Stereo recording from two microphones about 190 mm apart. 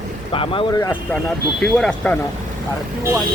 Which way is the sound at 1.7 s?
5° left (ahead or behind).